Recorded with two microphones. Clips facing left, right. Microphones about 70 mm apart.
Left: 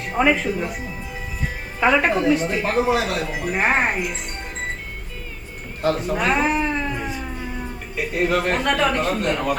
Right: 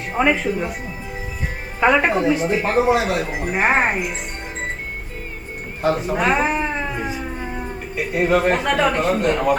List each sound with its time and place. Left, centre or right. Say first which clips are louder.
0.1 s speech: right 1 dB; centre
5.8 s cat: right 2 dB; centre
7.3 s a sound: right 3 dB; right
7.6 s speech: right 2 dB; centre